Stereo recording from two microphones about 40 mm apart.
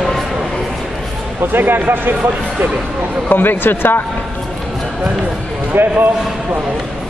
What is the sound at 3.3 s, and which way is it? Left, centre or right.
Speech, left.